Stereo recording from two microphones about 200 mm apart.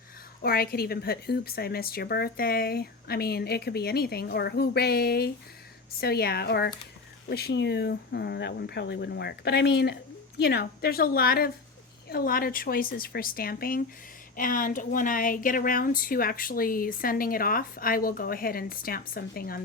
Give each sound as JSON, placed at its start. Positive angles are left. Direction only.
{"t": 0.4, "sound": "a woman's voice", "side_deg": 50}